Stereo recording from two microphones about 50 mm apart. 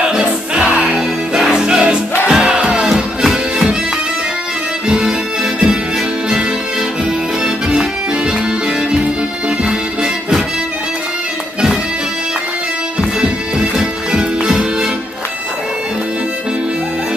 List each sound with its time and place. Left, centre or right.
0.6 s music: right
0.9 s music: centre
2.9 s music: centre
4.8 s music: centre
13.2 s music: centre